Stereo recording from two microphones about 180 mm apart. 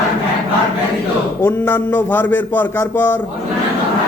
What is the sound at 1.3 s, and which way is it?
A man's voice, 10° left (ahead or behind).